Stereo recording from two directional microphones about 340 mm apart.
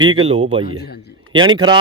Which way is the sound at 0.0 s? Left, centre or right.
Centre.